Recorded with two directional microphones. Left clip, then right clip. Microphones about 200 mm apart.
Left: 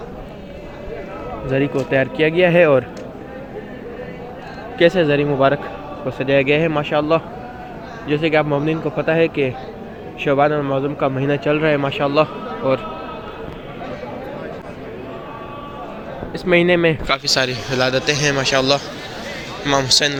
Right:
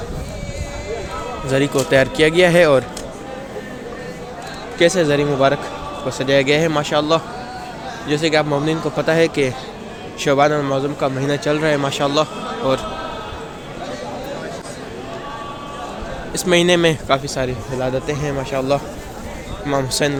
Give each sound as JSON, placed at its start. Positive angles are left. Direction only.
{"t": 1.5, "sound": "speech", "side_deg": -30}
{"t": 4.8, "sound": "a man's voice", "side_deg": -15}
{"t": 16.3, "sound": "speech", "side_deg": -25}
{"t": 17.1, "sound": "a man's voice", "side_deg": -5}